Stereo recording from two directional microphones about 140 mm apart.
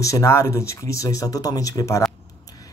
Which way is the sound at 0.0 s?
20° left (ahead or behind).